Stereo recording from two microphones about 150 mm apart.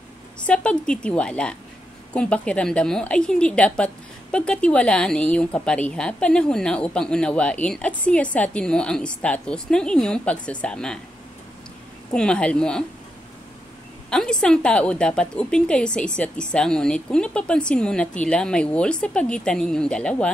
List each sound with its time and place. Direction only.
0.5 s a woman's voice: 5° left (ahead or behind)
12.1 s a woman's voice: 5° left (ahead or behind)
14.1 s a woman's voice: 5° left (ahead or behind)